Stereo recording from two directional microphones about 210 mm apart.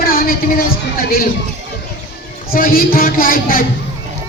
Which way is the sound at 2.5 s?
45° left (ahead or behind).